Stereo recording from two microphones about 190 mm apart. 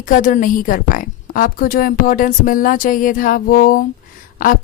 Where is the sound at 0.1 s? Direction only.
45° left (ahead or behind).